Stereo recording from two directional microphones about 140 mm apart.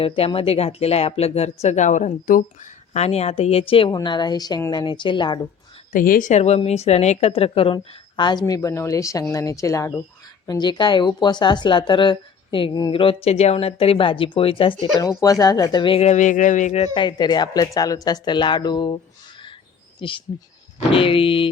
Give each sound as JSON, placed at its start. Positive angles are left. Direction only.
{"t": 0.0, "sound": "speech", "side_deg": 45}
{"t": 2.9, "sound": "speech", "side_deg": 50}
{"t": 5.9, "sound": "a woman's voice", "side_deg": 75}
{"t": 13.2, "sound": "speech", "side_deg": 50}
{"t": 15.2, "sound": "speech", "side_deg": 25}
{"t": 16.9, "sound": "speech", "side_deg": 35}
{"t": 20.0, "sound": "speech", "side_deg": 40}